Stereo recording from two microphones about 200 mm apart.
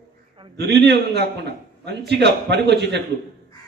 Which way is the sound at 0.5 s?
55° right (ahead or behind).